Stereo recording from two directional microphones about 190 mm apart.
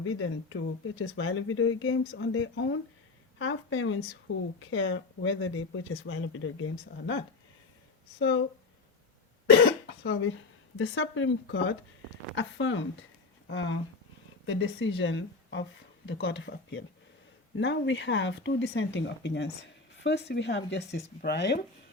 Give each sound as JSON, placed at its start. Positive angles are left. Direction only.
{"t": 0.0, "sound": "speech", "side_deg": 90}
{"t": 8.2, "sound": "speech", "side_deg": 75}
{"t": 9.5, "sound": "cough", "side_deg": 65}
{"t": 10.8, "sound": "speech", "side_deg": 90}